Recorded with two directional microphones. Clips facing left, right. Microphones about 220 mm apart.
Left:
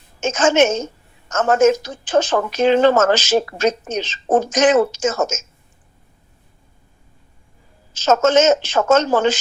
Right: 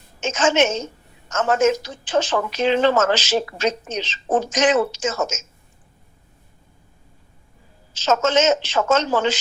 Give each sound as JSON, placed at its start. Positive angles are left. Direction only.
{"t": 0.2, "sound": "speech", "side_deg": 45}
{"t": 7.9, "sound": "speech", "side_deg": 45}